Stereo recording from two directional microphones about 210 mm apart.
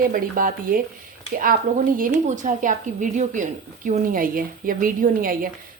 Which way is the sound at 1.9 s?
40° right (ahead or behind).